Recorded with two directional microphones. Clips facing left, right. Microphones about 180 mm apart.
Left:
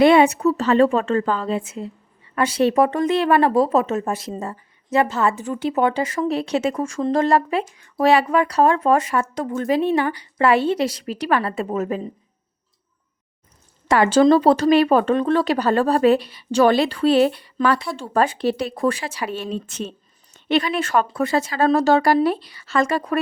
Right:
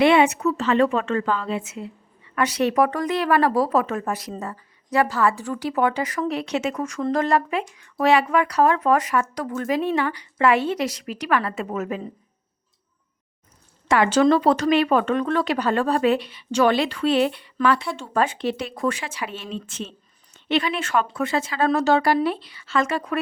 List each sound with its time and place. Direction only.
0.0 s speech: 35° left (ahead or behind)
13.8 s speech: 35° left (ahead or behind)